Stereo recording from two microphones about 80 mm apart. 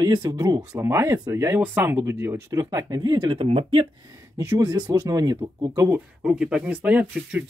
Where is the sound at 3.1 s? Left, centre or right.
Right.